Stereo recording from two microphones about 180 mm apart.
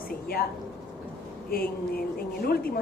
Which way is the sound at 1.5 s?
55° left (ahead or behind).